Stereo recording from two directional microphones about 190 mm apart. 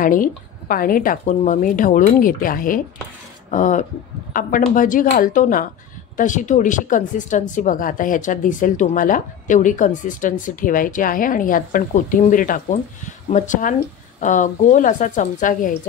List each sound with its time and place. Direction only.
0.0 s speech: 45° left (ahead or behind)